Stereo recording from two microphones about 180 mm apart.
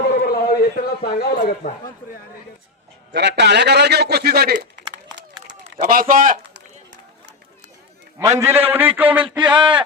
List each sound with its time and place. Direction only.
0.2 s a sound: 55° left (ahead or behind)
3.1 s a man's voice: 75° right (ahead or behind)
5.6 s speech: 45° right (ahead or behind)
8.2 s a man's voice: 15° right (ahead or behind)